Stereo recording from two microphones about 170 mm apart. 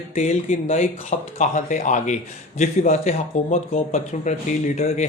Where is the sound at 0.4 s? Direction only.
50° left (ahead or behind).